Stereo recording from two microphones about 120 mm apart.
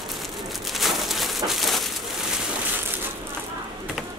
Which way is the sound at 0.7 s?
Centre (ahead or behind).